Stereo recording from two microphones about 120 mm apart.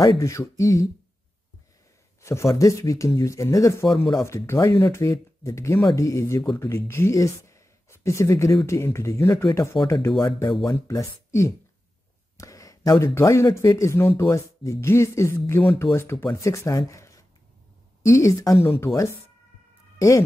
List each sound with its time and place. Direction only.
0.0 s speech: 25° left (ahead or behind)
2.2 s speech: 25° left (ahead or behind)
12.4 s a sound: 30° left (ahead or behind)
13.0 s speech: 25° left (ahead or behind)
20.0 s speech: 30° left (ahead or behind)